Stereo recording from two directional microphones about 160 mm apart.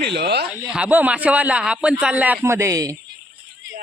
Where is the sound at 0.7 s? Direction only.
10° right (ahead or behind).